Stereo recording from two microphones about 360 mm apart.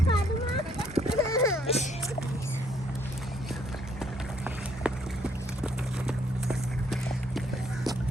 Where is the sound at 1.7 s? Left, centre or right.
Centre.